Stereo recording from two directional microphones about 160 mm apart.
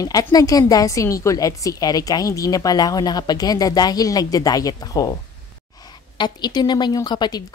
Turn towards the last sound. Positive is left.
turn(degrees=30)  # may be behind; listen again after turning